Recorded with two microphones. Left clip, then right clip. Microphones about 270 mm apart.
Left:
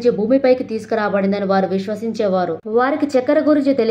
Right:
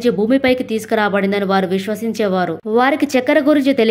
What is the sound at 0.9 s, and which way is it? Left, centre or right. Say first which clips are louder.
Speech: right 2 dB; right.